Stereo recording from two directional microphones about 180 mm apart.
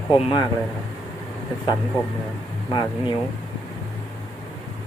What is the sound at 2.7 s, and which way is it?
Speech, 25° left (ahead or behind).